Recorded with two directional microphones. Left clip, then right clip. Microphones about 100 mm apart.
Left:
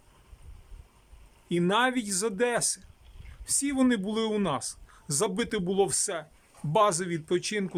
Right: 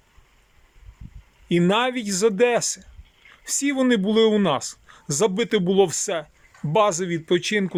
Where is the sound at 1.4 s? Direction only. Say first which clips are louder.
Right 5 dB; 10° right (ahead or behind).